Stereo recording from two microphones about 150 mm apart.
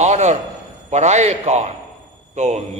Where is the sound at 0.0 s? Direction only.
50° right (ahead or behind).